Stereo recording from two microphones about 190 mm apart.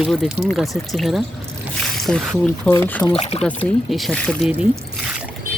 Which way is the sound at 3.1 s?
35° left (ahead or behind).